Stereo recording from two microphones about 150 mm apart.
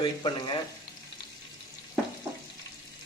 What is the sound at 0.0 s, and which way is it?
Speech, 30° left (ahead or behind).